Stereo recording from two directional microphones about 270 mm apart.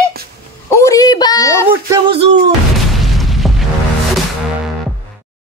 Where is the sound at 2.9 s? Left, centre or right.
Centre.